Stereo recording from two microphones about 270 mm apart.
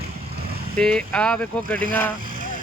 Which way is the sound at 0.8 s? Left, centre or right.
Centre.